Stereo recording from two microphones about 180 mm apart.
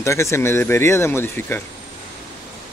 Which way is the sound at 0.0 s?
15° left (ahead or behind).